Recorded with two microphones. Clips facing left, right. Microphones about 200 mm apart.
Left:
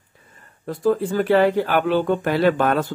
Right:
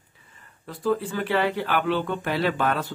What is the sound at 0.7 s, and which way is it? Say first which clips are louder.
Speech: left 5 dB; 45° left (ahead or behind).